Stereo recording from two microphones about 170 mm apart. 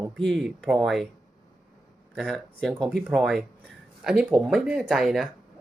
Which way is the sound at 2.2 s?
Centre (ahead or behind).